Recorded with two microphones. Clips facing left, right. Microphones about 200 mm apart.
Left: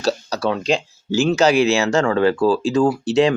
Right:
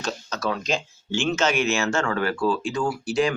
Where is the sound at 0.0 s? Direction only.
35° left (ahead or behind).